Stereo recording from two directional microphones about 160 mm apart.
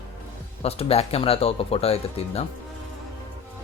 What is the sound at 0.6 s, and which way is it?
Speech, 40° left (ahead or behind).